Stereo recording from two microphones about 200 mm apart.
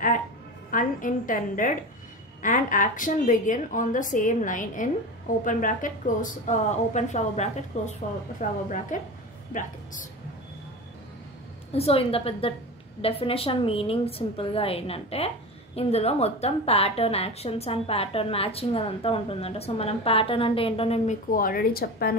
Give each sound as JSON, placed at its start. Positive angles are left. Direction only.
{"t": 0.7, "sound": "speech", "side_deg": 40}
{"t": 11.7, "sound": "a woman's voice", "side_deg": 30}